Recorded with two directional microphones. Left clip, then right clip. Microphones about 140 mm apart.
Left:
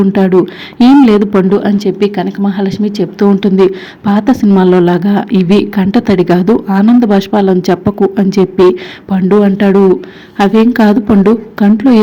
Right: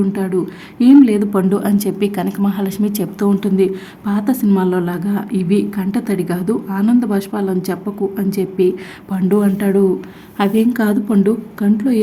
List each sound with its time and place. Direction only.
0.1 s a woman's voice: 35° left (ahead or behind)
1.5 s a woman's voice: 10° left (ahead or behind)
3.4 s a woman's voice: 30° left (ahead or behind)